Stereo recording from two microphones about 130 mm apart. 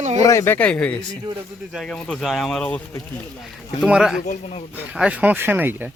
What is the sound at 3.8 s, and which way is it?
A man's voice, 5° right (ahead or behind).